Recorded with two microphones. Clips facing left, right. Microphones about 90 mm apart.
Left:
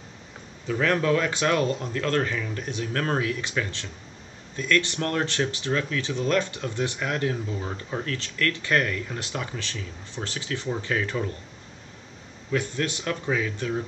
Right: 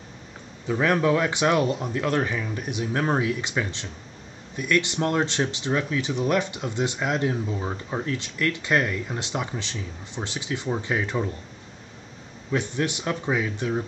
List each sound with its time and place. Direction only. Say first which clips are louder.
0.7 s speech: right 2 dB; 15° right (ahead or behind)
12.4 s speech: right 1 dB; 20° right (ahead or behind)